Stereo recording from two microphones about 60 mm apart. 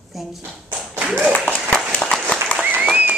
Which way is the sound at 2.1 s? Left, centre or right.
Centre.